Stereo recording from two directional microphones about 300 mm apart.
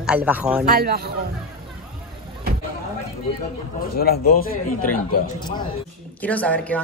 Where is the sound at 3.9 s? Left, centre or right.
Left.